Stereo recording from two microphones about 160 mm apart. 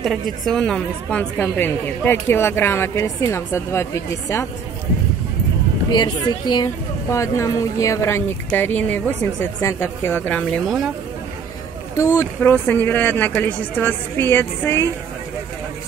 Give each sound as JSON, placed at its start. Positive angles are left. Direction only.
{"t": 0.0, "sound": "a woman's voice", "side_deg": 0}
{"t": 5.9, "sound": "a woman's voice", "side_deg": 25}
{"t": 12.0, "sound": "a woman's voice", "side_deg": 20}